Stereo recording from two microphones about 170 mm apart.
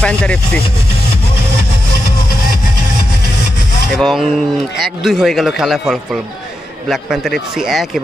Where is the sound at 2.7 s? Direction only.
80° left.